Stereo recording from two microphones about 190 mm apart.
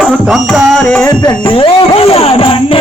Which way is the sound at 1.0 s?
20° left (ahead or behind).